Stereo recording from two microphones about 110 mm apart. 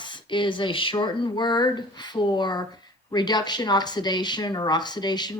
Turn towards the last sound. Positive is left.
turn(degrees=40)  # may be behind; listen again after turning